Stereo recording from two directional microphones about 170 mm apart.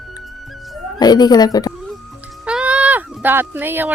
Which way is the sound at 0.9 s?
25° left (ahead or behind).